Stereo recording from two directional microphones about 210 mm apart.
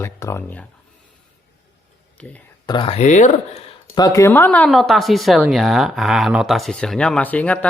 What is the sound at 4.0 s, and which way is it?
Speech, 15° left (ahead or behind).